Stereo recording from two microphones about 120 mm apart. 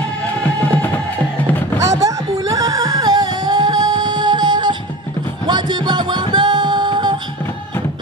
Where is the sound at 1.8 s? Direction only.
25° right (ahead or behind).